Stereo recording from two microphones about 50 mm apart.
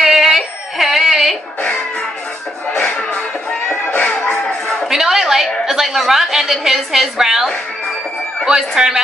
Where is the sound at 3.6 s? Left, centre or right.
Left.